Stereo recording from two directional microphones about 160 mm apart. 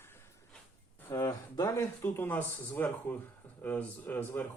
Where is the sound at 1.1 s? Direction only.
20° left (ahead or behind).